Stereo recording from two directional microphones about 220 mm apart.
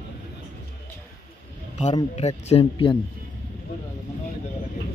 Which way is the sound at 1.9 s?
30° left (ahead or behind).